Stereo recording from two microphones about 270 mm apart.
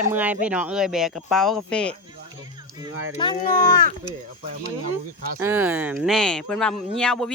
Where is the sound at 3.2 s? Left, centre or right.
Centre.